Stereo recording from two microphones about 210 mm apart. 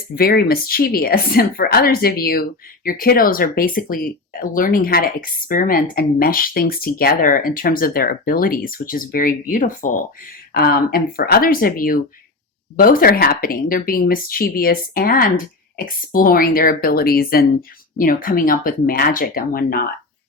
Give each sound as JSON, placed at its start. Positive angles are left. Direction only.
{"t": 0.2, "sound": "speech", "side_deg": 45}